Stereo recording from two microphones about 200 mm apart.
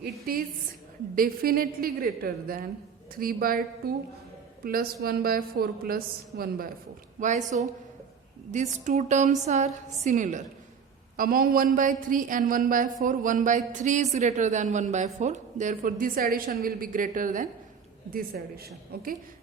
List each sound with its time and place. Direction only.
0.0 s a woman's voice: 45° right (ahead or behind)
7.2 s a woman's voice: 35° right (ahead or behind)